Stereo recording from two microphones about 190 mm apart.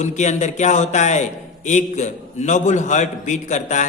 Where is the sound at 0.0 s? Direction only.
40° left (ahead or behind).